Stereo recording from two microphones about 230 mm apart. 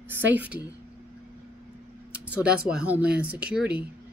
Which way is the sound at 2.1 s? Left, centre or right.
Centre.